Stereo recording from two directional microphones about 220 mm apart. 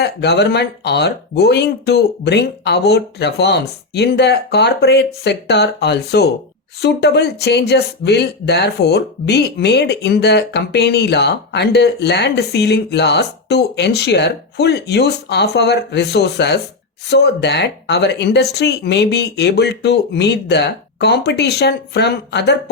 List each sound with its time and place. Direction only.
0.0 s speech: 50° left (ahead or behind)